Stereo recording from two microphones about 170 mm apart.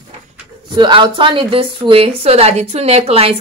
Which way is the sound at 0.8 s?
25° right (ahead or behind).